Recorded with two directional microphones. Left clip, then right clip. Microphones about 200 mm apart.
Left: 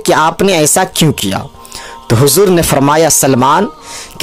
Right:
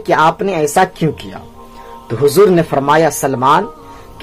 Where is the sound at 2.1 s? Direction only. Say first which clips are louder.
Left 1 dB; 40° left (ahead or behind).